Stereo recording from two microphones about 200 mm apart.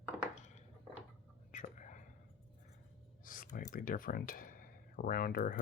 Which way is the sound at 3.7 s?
45° left (ahead or behind).